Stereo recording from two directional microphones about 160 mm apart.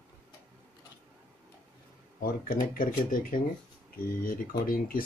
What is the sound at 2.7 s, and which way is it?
Speech, 60° left (ahead or behind).